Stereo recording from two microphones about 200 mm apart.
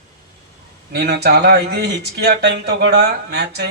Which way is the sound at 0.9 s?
55° right (ahead or behind).